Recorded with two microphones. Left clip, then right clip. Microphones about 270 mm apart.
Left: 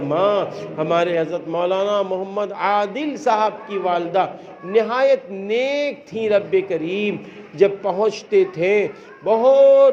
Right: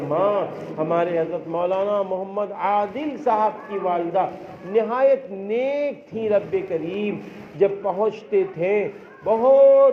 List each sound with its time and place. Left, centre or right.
0.1 s a man's voice: left